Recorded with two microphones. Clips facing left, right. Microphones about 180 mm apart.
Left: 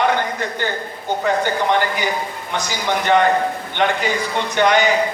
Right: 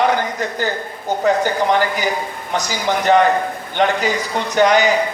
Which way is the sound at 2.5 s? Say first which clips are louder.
Right 3 dB; 40° right (ahead or behind).